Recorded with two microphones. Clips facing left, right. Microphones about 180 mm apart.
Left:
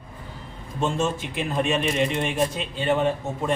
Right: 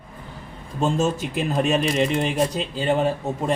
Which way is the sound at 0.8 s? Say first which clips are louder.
Right 3 dB; 40° right (ahead or behind).